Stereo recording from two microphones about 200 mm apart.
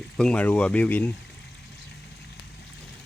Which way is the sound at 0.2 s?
5° left (ahead or behind).